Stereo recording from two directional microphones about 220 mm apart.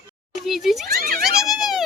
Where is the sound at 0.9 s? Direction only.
45° right (ahead or behind).